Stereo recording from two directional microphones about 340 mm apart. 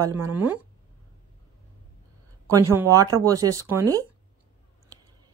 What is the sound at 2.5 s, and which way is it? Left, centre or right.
Speech, centre.